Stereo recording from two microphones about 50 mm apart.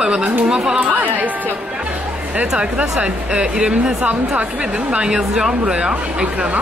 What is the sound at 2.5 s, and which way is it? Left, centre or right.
A woman's voice, right.